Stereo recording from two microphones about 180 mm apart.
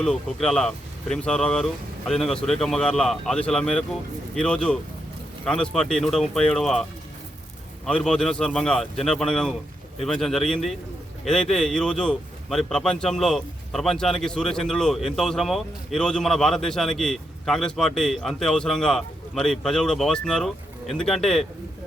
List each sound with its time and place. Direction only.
0.0 s a man's voice: 5° left (ahead or behind)
7.9 s a man's voice: 5° left (ahead or behind)